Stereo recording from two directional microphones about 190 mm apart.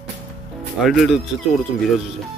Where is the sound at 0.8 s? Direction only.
Centre (ahead or behind).